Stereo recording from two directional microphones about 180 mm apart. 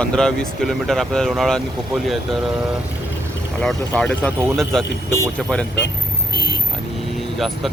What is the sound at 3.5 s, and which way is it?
Speech, 5° left (ahead or behind).